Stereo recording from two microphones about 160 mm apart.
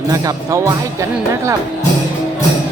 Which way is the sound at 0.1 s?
20° right (ahead or behind).